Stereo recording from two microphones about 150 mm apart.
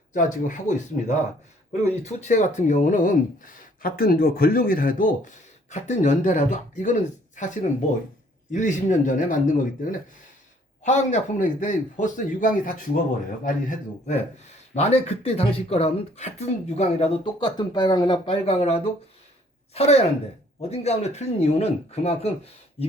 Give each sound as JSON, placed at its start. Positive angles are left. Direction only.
{"t": 0.1, "sound": "speech", "side_deg": 55}
{"t": 5.7, "sound": "speech", "side_deg": 50}
{"t": 14.8, "sound": "speech", "side_deg": 45}